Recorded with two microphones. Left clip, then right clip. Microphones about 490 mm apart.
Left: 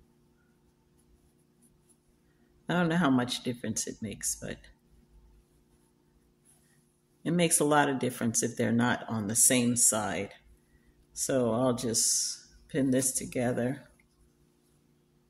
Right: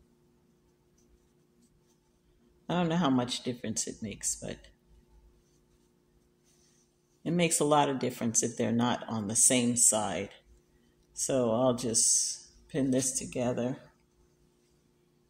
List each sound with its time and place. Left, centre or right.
2.6 s speech: left
7.2 s speech: left